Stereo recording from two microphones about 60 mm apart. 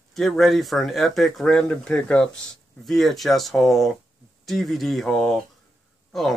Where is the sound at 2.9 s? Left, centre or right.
Centre.